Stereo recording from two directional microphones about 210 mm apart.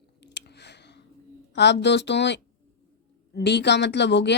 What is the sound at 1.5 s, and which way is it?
A woman's voice, 55° left (ahead or behind).